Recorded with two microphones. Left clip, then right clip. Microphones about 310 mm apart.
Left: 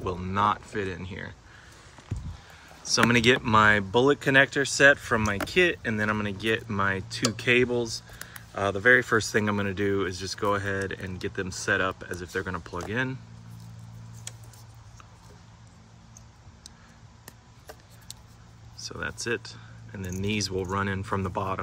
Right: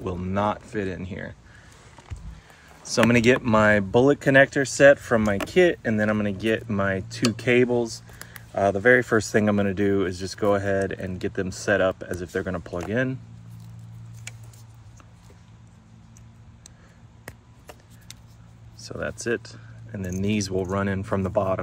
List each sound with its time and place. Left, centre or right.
0.0 s speech: centre
2.9 s speech: centre
18.8 s speech: centre